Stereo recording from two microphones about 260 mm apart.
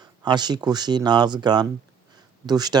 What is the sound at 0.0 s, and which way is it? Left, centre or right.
Speech, centre.